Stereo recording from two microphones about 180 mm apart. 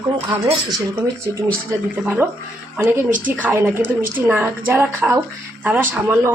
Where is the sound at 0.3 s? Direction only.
25° right (ahead or behind).